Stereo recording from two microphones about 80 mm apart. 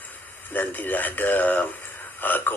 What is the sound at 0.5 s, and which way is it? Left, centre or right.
A man's voice, left.